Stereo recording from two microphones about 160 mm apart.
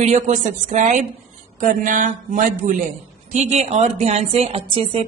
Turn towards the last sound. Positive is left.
turn(degrees=-35)  # may be behind; listen again after turning